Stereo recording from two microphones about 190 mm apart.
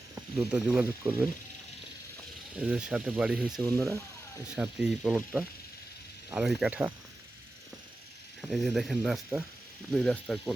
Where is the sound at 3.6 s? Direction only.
15° right (ahead or behind).